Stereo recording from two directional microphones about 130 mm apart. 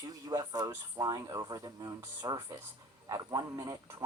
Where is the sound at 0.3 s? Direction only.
30° right (ahead or behind).